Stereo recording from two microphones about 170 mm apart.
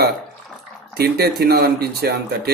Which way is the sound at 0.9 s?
65° right (ahead or behind).